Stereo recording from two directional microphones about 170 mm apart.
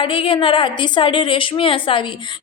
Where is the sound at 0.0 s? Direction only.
30° left (ahead or behind).